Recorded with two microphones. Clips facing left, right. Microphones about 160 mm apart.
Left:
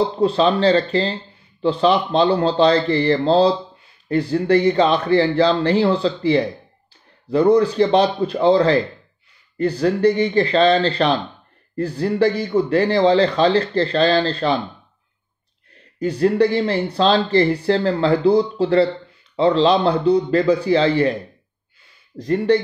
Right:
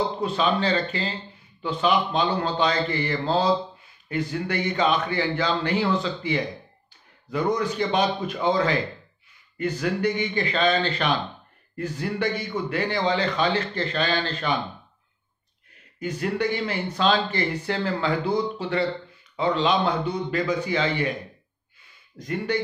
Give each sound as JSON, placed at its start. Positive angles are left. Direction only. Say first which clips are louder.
{"t": 0.2, "sound": "speech", "louder": "left 10 dB", "side_deg": 30}
{"t": 16.0, "sound": "speech", "louder": "left 10 dB", "side_deg": 35}
{"t": 22.2, "sound": "speech", "louder": "left 10 dB", "side_deg": 35}